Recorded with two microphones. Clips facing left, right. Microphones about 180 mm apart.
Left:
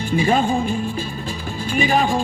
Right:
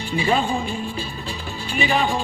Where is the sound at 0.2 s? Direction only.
45° left (ahead or behind).